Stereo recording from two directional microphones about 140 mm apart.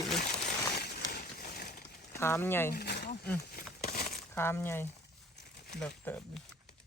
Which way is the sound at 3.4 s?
90° left.